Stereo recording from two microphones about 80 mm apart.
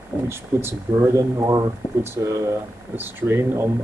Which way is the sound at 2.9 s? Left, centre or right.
Right.